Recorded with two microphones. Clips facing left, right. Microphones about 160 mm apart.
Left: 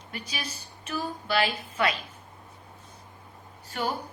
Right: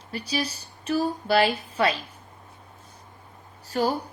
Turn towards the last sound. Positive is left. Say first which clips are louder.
# right 6 dB
turn(degrees=-40)  # may be behind; listen again after turning